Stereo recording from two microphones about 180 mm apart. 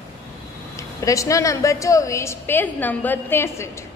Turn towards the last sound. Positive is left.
turn(degrees=15)  # may be behind; listen again after turning